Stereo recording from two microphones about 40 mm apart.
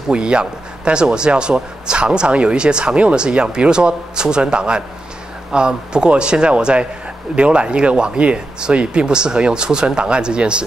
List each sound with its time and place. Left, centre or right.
0.1 s speech: right